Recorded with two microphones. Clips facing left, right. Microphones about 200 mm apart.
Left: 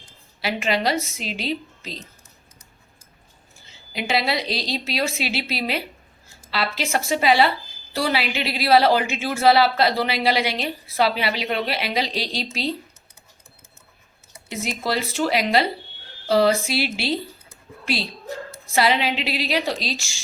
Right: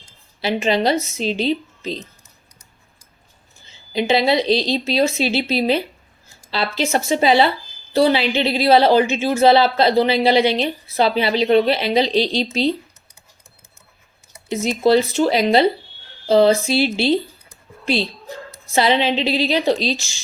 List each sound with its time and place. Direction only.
0.4 s a woman's voice: 25° right (ahead or behind)
3.9 s a woman's voice: 25° right (ahead or behind)
14.5 s a woman's voice: 25° right (ahead or behind)
18.7 s a woman's voice: 25° right (ahead or behind)